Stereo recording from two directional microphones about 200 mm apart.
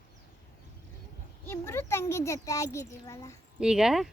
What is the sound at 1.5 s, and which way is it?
A child's voice, 15° left (ahead or behind).